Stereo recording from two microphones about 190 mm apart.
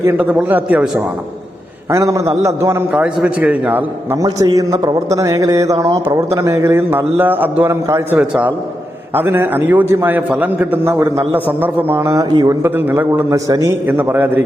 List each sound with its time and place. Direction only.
0.0 s a man's voice: 10° right (ahead or behind)
1.9 s a man's voice: 15° right (ahead or behind)